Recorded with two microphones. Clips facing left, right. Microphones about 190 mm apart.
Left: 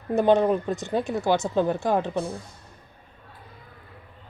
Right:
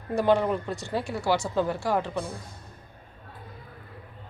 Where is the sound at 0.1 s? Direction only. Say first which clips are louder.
Left 4 dB; 20° left (ahead or behind).